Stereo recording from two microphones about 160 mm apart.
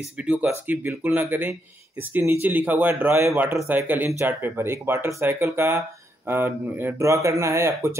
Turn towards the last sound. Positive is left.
turn(degrees=-15)  # may be behind; listen again after turning